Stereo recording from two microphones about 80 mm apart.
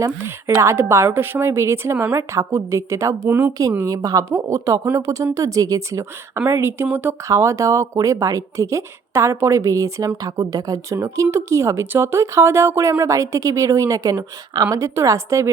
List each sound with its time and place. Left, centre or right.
0.5 s speech: right
3.2 s speech: centre
3.6 s a woman's voice: right
7.3 s speech: right